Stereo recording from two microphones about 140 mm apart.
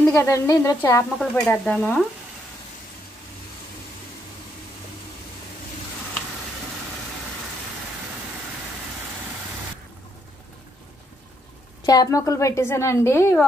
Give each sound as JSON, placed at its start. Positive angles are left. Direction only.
{"t": 0.0, "sound": "a woman's voice", "side_deg": 15}
{"t": 1.1, "sound": "stir", "side_deg": 5}
{"t": 11.8, "sound": "a woman's voice", "side_deg": 25}